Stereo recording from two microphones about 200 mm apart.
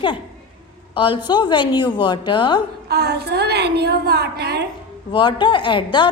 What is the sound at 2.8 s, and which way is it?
A woman's voice, 55° right (ahead or behind).